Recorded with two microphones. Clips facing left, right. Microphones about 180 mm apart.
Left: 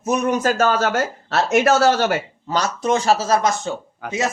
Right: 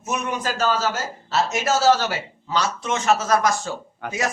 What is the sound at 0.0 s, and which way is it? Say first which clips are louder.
Speech: left 7 dB; 40° left (ahead or behind).